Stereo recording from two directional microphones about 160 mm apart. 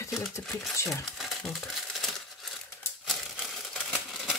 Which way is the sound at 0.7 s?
15° left (ahead or behind).